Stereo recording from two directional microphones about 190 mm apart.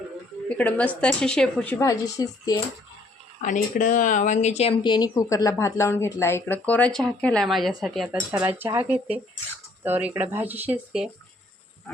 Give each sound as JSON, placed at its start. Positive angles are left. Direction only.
{"t": 0.4, "sound": "speech", "side_deg": 5}
{"t": 3.4, "sound": "speech", "side_deg": 45}
{"t": 4.8, "sound": "speech", "side_deg": 20}